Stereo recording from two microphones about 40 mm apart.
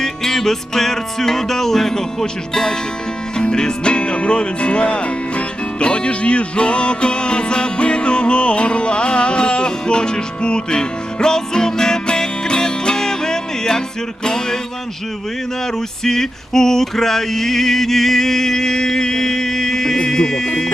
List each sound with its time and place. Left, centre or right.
0.0 s male singing: centre
3.5 s speech: left
5.8 s music: left
14.3 s male singing: centre
16.0 s male singing: centre
20.1 s music: centre